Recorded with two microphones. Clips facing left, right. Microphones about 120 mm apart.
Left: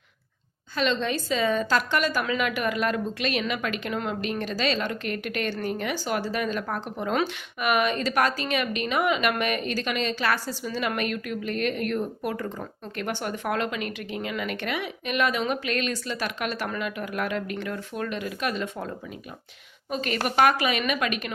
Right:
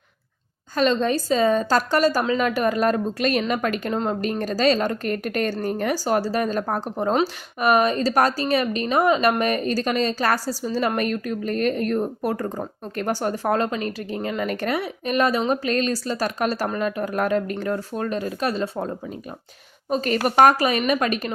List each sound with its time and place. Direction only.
0.8 s a woman's voice: 40° right (ahead or behind)